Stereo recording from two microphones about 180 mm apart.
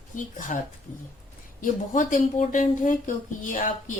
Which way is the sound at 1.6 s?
45° left (ahead or behind).